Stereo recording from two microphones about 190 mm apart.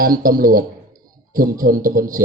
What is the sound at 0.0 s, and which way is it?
Speech, 50° right (ahead or behind).